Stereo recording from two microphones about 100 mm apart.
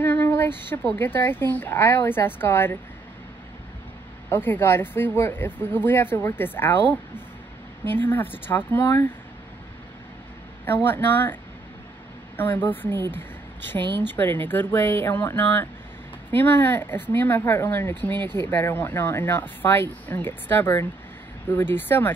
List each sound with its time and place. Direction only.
0.0 s a sound: 20° left (ahead or behind)
0.7 s speech: 20° left (ahead or behind)
4.3 s speech: 20° left (ahead or behind)
10.6 s speech: 20° left (ahead or behind)
12.4 s a woman's voice: 20° left (ahead or behind)